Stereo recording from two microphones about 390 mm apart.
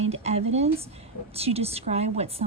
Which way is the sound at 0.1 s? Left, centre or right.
Centre.